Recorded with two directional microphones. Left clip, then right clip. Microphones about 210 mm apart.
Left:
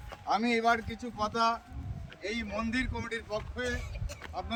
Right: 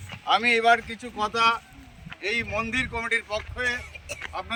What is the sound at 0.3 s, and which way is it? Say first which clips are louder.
Speech: right 8 dB; 30° right (ahead or behind).